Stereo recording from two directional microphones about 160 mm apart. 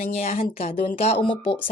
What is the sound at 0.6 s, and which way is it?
Speech, 40° left (ahead or behind).